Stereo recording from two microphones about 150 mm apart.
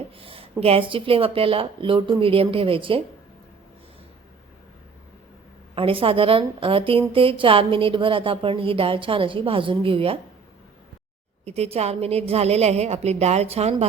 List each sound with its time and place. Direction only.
0.2 s a sound: 40° right (ahead or behind)
0.6 s a woman's voice: 40° right (ahead or behind)
5.7 s a woman's voice: 35° right (ahead or behind)
11.4 s a woman's voice: 45° right (ahead or behind)